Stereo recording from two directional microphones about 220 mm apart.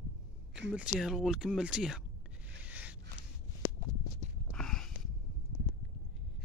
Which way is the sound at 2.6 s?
5° right (ahead or behind).